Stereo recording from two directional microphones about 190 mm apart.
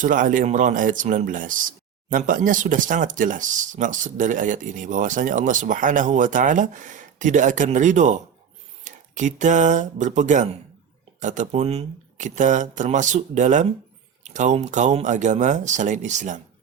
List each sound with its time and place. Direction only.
0.0 s speech: 45° right (ahead or behind)